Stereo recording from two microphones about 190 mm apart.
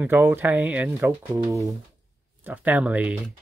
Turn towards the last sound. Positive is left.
turn(degrees=-5)  # may be behind; listen again after turning